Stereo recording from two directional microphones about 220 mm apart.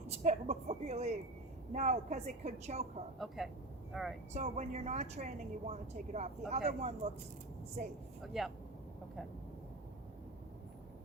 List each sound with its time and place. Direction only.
0.1 s a woman's voice: 30° right (ahead or behind)
3.2 s speech: centre (ahead or behind)
4.4 s a woman's voice: 30° right (ahead or behind)
8.2 s speech: centre (ahead or behind)